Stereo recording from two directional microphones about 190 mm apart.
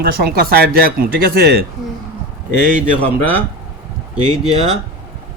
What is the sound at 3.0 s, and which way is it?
Speech, 10° left (ahead or behind).